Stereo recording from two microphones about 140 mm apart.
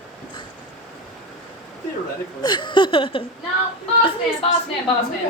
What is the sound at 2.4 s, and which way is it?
Speech, 30° left (ahead or behind).